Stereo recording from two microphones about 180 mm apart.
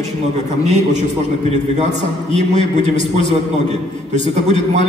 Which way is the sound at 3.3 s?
40° right (ahead or behind).